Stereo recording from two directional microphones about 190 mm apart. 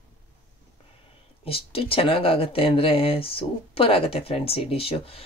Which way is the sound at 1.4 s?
30° left (ahead or behind).